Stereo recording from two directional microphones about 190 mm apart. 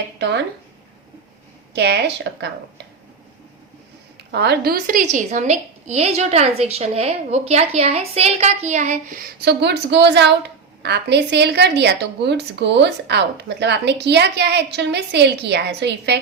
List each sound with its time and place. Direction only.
0.2 s a sound: 65° right (ahead or behind)
1.7 s a woman's voice: 60° right (ahead or behind)
4.3 s a woman's voice: 60° right (ahead or behind)